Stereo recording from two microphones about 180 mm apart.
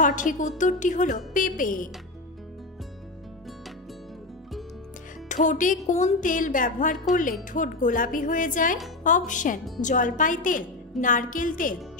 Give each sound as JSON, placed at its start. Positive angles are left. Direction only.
{"t": 0.0, "sound": "a woman's voice", "side_deg": 45}
{"t": 5.3, "sound": "a woman's voice", "side_deg": 45}